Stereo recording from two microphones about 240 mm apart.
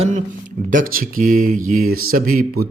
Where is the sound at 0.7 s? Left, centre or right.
Right.